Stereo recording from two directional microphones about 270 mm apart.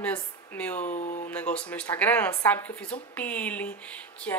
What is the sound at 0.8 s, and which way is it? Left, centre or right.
Speech, left.